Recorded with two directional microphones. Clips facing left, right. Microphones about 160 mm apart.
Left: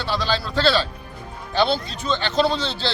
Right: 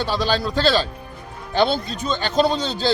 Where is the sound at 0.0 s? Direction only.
45° right (ahead or behind).